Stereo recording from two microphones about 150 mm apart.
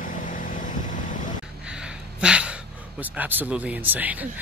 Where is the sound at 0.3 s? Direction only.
60° left (ahead or behind).